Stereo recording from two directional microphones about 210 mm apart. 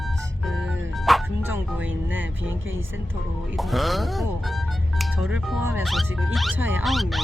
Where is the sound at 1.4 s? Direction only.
10° right (ahead or behind).